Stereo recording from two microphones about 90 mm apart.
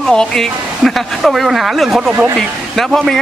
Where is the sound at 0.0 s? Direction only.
10° left (ahead or behind).